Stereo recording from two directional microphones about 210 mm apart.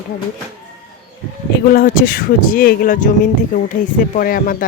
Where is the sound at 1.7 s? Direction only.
40° left (ahead or behind).